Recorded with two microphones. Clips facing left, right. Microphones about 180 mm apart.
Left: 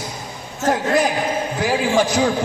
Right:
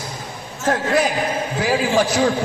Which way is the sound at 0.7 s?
5° right (ahead or behind).